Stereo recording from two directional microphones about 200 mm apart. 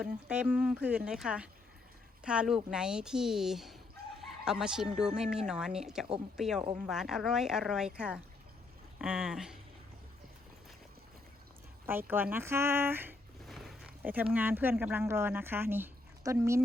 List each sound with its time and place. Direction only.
0.0 s speech: 5° right (ahead or behind)
11.9 s speech: 10° right (ahead or behind)